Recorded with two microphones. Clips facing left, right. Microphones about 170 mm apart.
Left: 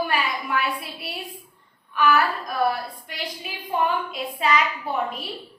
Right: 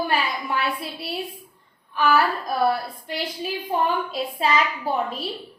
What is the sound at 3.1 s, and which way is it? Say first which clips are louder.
A woman's voice: right 11 dB; 30° right (ahead or behind).